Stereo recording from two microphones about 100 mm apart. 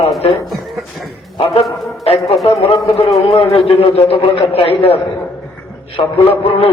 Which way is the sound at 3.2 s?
75° left (ahead or behind).